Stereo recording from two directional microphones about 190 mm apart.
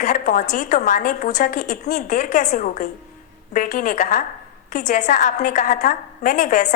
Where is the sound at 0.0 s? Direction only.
45° left (ahead or behind).